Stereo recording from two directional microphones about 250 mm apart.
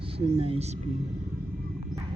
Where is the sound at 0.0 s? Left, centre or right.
Right.